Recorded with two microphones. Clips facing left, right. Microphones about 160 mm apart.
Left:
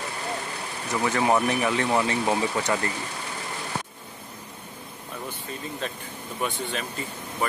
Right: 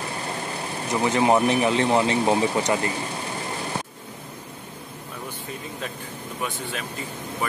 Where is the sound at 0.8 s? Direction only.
20° right (ahead or behind).